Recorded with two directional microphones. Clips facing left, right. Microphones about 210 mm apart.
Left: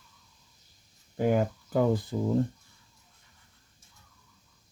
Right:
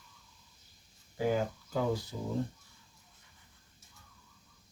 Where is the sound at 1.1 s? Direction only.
55° left (ahead or behind).